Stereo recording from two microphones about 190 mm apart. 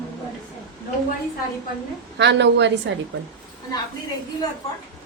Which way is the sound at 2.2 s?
65° right (ahead or behind).